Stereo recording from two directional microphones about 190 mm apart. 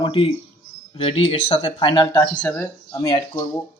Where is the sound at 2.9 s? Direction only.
20° left (ahead or behind).